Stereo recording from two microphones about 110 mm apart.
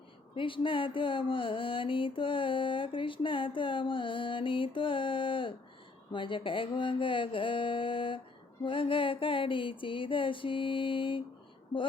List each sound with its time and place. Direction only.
0.3 s mantra: 50° left (ahead or behind)